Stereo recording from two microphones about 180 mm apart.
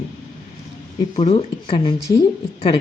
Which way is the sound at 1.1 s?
30° left (ahead or behind).